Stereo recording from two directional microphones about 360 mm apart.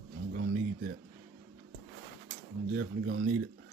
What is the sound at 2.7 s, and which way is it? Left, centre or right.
Speech, right.